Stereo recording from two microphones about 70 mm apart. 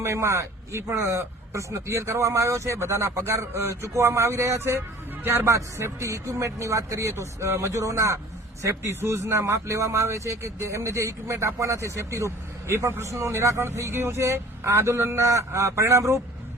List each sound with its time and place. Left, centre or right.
0.0 s a man's voice: right
5.5 s a man's voice: right